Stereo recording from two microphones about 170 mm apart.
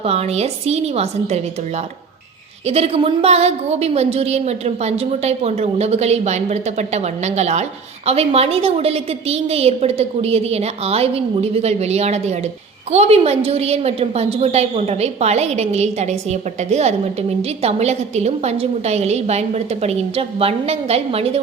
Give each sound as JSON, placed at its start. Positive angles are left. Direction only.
{"t": 0.0, "sound": "a woman's voice", "side_deg": -35}
{"t": 2.6, "sound": "a woman's voice", "side_deg": -35}